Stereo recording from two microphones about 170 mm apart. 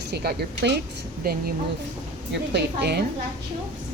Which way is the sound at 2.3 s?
80° right.